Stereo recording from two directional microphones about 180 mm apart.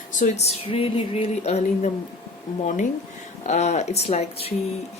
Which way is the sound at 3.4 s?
40° left (ahead or behind).